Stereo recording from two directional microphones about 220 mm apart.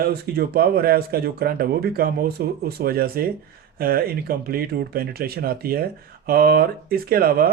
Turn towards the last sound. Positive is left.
turn(degrees=-40)  # may be behind; listen again after turning